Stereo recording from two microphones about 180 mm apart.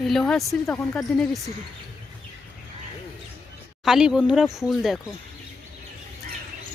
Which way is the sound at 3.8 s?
5° right (ahead or behind).